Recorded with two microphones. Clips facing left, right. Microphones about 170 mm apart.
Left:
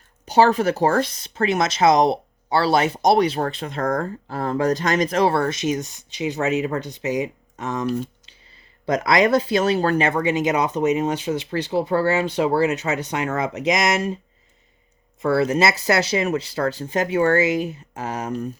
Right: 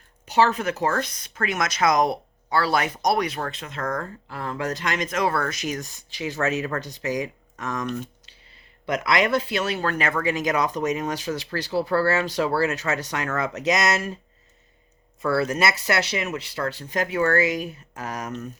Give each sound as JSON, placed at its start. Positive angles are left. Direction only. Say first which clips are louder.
{"t": 0.3, "sound": "speech", "louder": "left 5 dB", "side_deg": 35}
{"t": 9.0, "sound": "speech", "louder": "left 5 dB", "side_deg": 30}
{"t": 15.2, "sound": "speech", "louder": "left 4 dB", "side_deg": 20}